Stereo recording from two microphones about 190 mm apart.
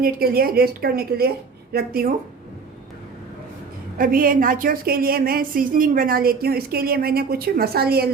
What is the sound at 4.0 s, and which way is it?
A woman's voice, 50° right (ahead or behind).